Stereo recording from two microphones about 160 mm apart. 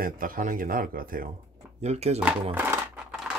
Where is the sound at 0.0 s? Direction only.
60° right (ahead or behind).